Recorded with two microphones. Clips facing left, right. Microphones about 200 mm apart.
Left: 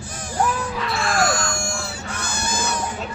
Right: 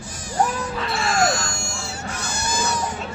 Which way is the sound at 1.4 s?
55° left (ahead or behind).